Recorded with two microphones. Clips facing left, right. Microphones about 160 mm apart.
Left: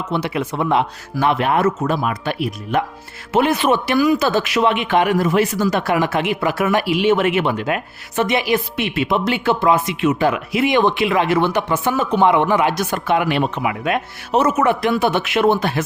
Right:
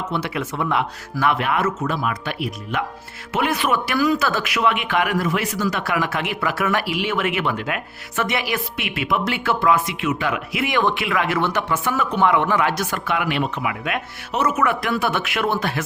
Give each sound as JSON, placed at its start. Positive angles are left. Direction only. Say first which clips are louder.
{"t": 0.1, "sound": "speech", "louder": "left 4 dB", "side_deg": 20}
{"t": 4.3, "sound": "speech", "louder": "left 4 dB", "side_deg": 30}
{"t": 13.1, "sound": "speech", "louder": "left 5 dB", "side_deg": 30}